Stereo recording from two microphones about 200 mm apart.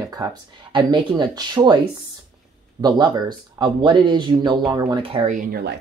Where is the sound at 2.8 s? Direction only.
20° right (ahead or behind).